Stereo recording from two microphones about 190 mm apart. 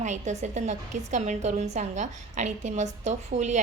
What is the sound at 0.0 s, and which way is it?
A woman's voice, 40° right (ahead or behind).